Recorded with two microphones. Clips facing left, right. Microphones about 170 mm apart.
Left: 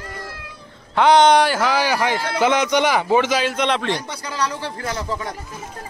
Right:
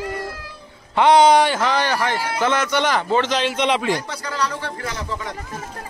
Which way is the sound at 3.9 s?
20° left (ahead or behind).